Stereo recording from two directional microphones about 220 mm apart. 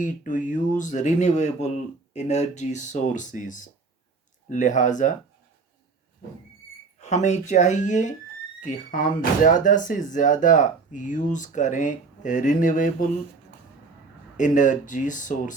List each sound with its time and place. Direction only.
0.0 s speech: 35° left (ahead or behind)
7.0 s speech: 30° left (ahead or behind)
14.3 s speech: 35° left (ahead or behind)